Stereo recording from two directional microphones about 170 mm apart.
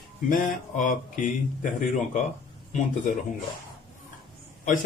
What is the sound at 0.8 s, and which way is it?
Speech, 50° left (ahead or behind).